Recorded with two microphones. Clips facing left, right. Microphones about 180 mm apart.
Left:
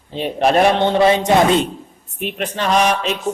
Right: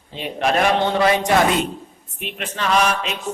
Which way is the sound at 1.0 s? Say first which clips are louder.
Left 5 dB; 25° left (ahead or behind).